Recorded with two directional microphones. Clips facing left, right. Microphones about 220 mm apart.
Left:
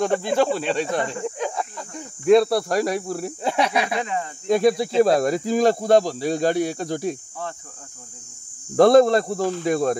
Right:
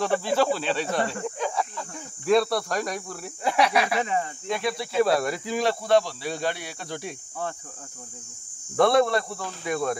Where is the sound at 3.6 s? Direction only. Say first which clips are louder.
Even; 20° left (ahead or behind).